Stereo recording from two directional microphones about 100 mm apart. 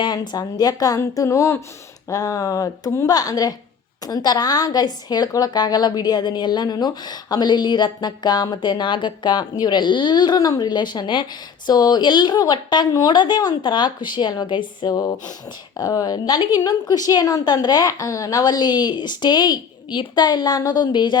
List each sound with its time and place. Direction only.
0.0 s a woman's voice: 45° left (ahead or behind)